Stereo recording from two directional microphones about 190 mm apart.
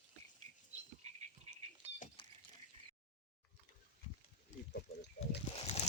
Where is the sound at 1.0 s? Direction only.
35° right (ahead or behind).